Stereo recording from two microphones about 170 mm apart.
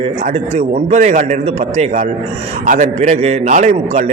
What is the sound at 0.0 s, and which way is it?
A man's voice, 40° right (ahead or behind).